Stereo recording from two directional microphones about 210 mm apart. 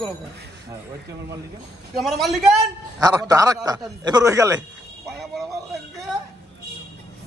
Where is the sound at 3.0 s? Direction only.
15° right (ahead or behind).